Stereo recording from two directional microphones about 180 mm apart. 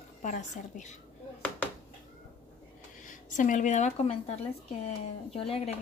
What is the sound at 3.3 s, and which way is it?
Speech, 45° left (ahead or behind).